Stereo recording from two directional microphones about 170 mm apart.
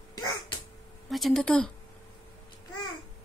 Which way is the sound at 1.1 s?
Centre (ahead or behind).